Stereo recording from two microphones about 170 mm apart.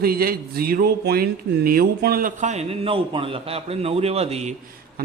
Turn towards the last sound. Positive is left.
turn(degrees=-40)  # may be behind; listen again after turning